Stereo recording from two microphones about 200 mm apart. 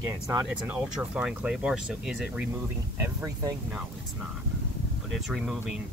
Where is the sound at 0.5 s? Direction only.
5° right (ahead or behind).